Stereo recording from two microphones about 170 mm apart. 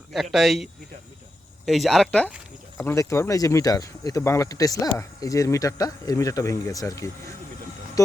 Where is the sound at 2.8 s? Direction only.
15° left (ahead or behind).